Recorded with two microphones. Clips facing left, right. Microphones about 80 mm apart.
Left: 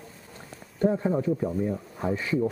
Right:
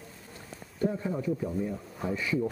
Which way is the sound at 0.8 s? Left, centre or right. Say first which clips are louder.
Left 6 dB; left.